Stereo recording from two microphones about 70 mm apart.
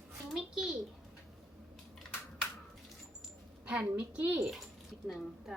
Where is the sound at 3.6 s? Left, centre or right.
Centre.